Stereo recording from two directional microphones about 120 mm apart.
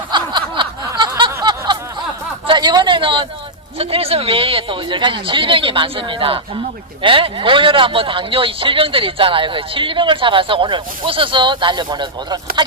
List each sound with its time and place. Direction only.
0.1 s snicker: 40° right (ahead or behind)
0.9 s a sound: 40° right (ahead or behind)
3.8 s a man's voice: 55° right (ahead or behind); by 12.6 s 40° right (ahead or behind)